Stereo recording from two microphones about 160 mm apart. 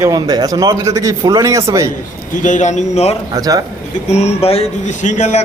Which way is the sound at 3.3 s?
20° right (ahead or behind).